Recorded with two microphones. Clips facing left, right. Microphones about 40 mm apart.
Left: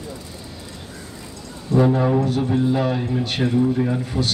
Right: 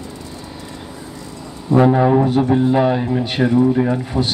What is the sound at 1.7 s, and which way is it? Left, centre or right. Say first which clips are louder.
Speech: right 5 dB; right.